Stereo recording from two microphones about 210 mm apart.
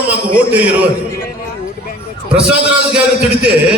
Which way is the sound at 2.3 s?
5° right (ahead or behind).